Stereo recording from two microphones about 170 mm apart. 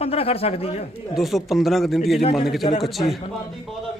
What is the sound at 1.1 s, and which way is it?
Speech, centre (ahead or behind).